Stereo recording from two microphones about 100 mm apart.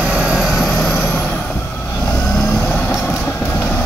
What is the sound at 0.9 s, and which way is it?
Vehicle, 20° left (ahead or behind).